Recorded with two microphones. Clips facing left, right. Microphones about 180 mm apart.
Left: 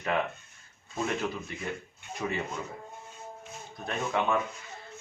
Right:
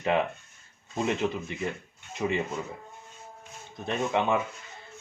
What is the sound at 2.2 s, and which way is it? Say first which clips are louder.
Speech: right 5 dB; 20° right (ahead or behind).